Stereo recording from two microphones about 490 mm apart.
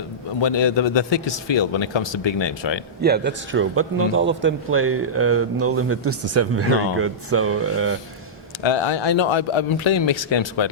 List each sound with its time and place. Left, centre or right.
0.4 s a man's voice: left
3.0 s a man's voice: centre
8.6 s a man's voice: left